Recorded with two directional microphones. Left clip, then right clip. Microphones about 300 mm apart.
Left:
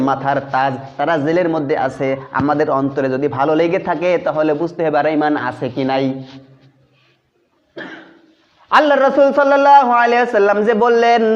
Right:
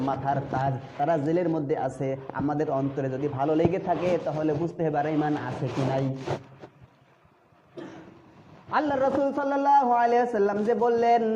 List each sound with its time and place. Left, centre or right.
0.0 s a man's voice: left
8.7 s a man's voice: left